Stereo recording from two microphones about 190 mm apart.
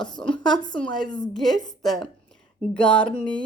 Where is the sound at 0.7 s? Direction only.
5° left (ahead or behind).